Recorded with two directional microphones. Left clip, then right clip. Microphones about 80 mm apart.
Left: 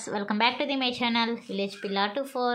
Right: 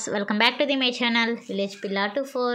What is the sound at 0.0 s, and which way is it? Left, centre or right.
A woman's voice, right.